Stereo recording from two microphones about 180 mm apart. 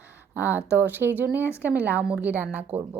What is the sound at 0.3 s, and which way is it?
A woman's voice, 10° right (ahead or behind).